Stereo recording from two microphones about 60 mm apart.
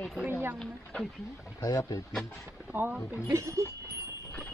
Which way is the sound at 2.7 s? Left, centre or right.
Right.